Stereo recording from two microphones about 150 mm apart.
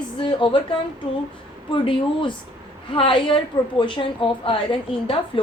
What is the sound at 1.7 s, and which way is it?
A woman's voice, 35° left (ahead or behind).